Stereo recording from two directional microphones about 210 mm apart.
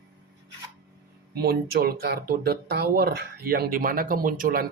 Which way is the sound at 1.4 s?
45° right (ahead or behind).